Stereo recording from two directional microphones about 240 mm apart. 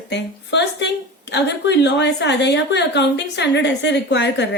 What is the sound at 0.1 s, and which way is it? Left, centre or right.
A woman's voice, left.